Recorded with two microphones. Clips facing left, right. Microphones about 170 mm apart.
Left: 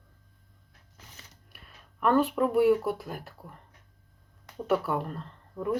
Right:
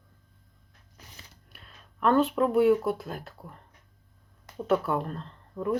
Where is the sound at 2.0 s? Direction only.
10° left (ahead or behind).